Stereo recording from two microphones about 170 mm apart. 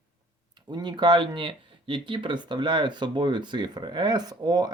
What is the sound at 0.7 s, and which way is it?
Speech, 25° right (ahead or behind).